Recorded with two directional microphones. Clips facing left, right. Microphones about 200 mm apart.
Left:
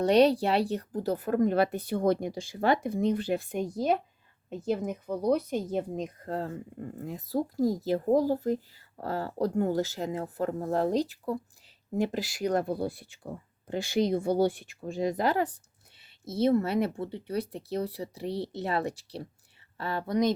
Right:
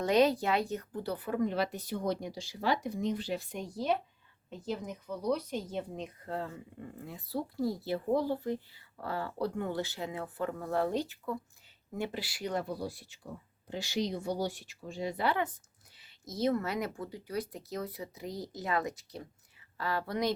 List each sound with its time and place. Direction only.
0.0 s a woman's voice: 35° left (ahead or behind)
16.0 s speech: 30° left (ahead or behind)